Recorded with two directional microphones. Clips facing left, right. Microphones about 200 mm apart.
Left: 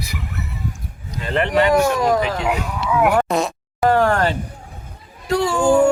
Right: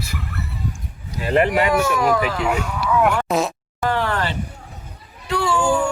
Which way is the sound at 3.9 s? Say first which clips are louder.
Left 6 dB; 45° left (ahead or behind).